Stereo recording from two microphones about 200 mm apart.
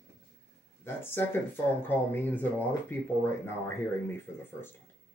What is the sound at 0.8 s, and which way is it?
Speech, 10° left (ahead or behind).